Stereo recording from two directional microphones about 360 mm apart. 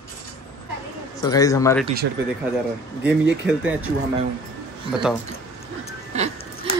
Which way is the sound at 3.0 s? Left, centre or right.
Centre.